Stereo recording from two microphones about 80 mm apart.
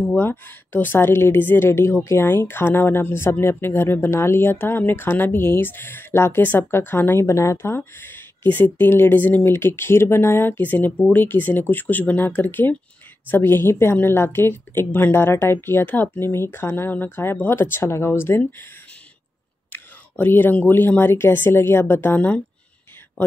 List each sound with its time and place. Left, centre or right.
0.1 s speech: left
19.7 s speech: left